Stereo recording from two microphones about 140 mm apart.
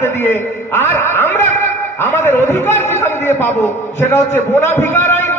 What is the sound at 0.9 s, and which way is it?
A man's voice, 15° left (ahead or behind).